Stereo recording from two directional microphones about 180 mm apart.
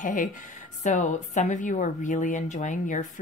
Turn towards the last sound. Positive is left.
turn(degrees=45)  # may be behind; listen again after turning